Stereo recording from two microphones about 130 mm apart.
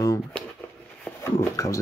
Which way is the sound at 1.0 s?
20° left (ahead or behind).